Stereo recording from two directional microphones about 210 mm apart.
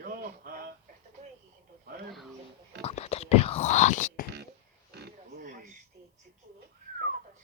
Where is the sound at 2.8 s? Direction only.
30° left (ahead or behind).